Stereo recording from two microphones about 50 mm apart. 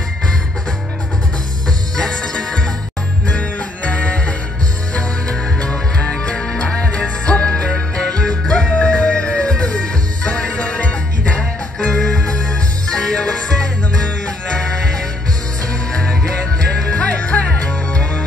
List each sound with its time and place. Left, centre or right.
2.0 s music: centre
3.3 s music: left